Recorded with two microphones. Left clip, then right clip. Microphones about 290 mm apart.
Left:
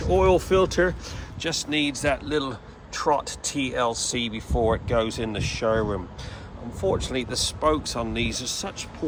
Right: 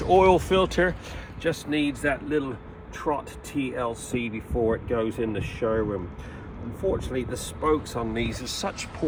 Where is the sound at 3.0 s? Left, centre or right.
Left.